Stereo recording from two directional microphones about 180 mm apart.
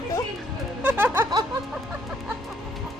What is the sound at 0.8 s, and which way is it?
Speech, 10° right (ahead or behind).